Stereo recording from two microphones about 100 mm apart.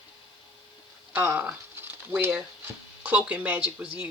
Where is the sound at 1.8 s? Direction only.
15° right (ahead or behind).